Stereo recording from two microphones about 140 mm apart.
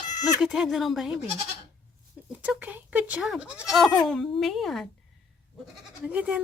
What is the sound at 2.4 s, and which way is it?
Speech, 10° right (ahead or behind).